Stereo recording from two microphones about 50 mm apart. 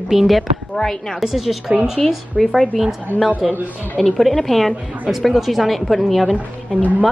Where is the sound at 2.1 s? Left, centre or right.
Centre.